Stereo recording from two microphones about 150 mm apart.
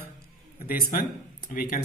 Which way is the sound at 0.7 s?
75° left (ahead or behind).